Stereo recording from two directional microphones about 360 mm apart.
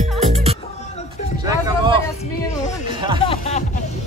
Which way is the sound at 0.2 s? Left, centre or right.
Centre.